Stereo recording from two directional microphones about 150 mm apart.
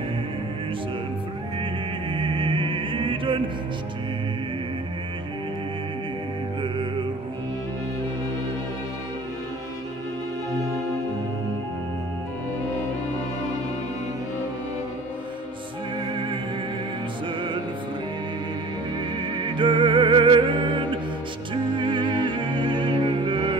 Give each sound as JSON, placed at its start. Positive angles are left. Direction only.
{"t": 1.6, "sound": "music", "side_deg": -35}
{"t": 19.3, "sound": "music", "side_deg": -30}